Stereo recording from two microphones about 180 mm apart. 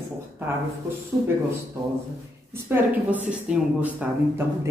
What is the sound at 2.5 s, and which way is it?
A woman's voice, 10° right (ahead or behind).